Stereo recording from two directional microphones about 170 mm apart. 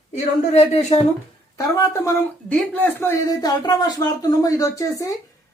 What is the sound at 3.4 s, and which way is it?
Speech, 25° left (ahead or behind).